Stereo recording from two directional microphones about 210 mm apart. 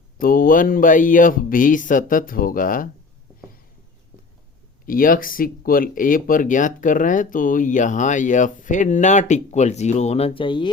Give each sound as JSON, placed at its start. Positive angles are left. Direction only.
{"t": 0.2, "sound": "speech", "side_deg": 40}
{"t": 4.9, "sound": "speech", "side_deg": 40}